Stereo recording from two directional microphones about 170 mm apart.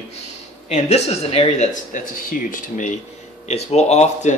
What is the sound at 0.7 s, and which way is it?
Speech, 40° left (ahead or behind).